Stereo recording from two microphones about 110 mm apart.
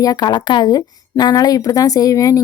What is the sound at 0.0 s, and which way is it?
Speech, 35° left (ahead or behind).